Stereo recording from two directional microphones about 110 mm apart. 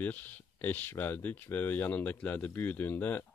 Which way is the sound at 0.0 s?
15° left (ahead or behind).